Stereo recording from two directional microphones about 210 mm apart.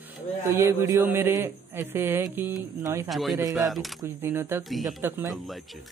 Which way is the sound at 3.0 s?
Centre (ahead or behind).